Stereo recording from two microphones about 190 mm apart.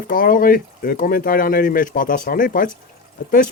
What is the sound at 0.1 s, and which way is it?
Speech, 45° left (ahead or behind).